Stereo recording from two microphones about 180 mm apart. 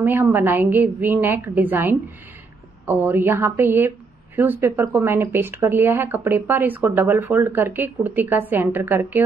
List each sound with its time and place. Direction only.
0.0 s speech: 10° right (ahead or behind)